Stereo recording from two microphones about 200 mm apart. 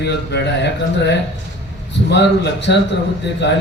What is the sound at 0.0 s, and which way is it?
A man's voice, 55° left (ahead or behind).